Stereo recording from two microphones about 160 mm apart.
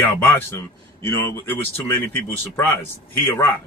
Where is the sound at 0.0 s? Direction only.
15° left (ahead or behind).